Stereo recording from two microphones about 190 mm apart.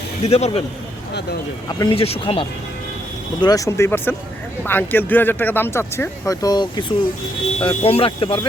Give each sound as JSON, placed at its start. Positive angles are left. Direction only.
{"t": 0.2, "sound": "speech", "side_deg": 35}
{"t": 1.6, "sound": "speech", "side_deg": 25}
{"t": 3.4, "sound": "speech", "side_deg": 20}